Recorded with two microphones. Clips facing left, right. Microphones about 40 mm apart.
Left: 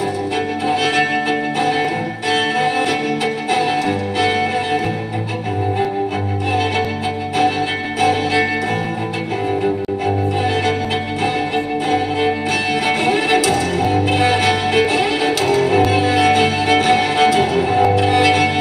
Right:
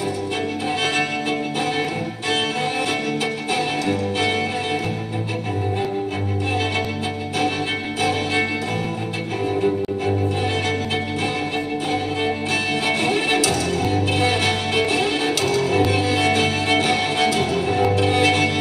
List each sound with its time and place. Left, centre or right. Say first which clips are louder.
4.2 s music: left 7 dB; left
8.0 s music: left 6 dB; left
12.8 s music: left 5 dB; left
15.0 s music: left 4 dB; left